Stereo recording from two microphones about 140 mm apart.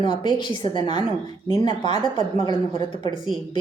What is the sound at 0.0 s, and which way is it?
A woman's voice, 35° left (ahead or behind).